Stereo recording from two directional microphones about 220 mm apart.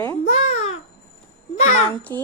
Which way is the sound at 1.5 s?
35° left (ahead or behind).